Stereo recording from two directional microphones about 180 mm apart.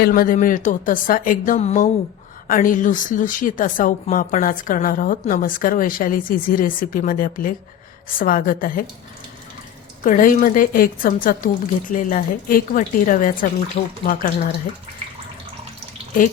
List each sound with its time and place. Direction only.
0.0 s a woman's voice: 55° left (ahead or behind)
10.0 s a woman's voice: 50° left (ahead or behind)